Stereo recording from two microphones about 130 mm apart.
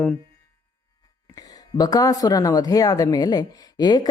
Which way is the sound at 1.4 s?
30° left (ahead or behind).